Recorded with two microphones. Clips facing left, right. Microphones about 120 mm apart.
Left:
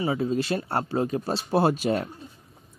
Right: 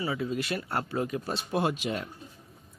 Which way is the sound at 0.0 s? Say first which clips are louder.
Left 6 dB; 35° left (ahead or behind).